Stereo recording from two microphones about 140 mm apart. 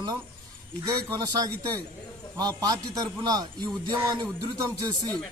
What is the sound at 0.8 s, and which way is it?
A man's voice, 25° right (ahead or behind).